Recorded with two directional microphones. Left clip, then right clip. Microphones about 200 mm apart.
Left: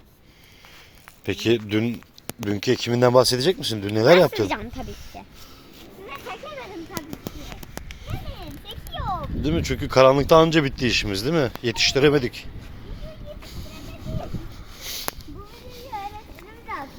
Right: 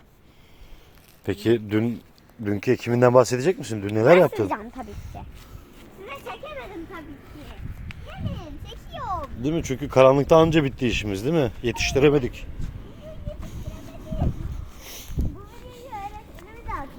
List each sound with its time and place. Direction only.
1.2 s speech: 5° right (ahead or behind)
4.4 s speech: 15° left (ahead or behind)
6.1 s a sound: 5° right (ahead or behind)
8.6 s speech: 5° right (ahead or behind)
13.4 s vehicle: 5° right (ahead or behind)
14.8 s a sound: 5° right (ahead or behind)